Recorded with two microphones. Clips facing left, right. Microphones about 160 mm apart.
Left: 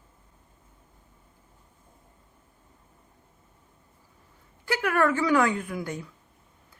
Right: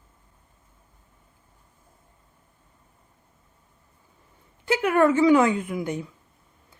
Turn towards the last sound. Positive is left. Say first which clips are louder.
# right 4 dB
turn(degrees=-20)  # may be behind; listen again after turning